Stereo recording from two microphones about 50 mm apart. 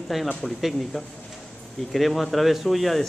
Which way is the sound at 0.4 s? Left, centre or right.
Centre.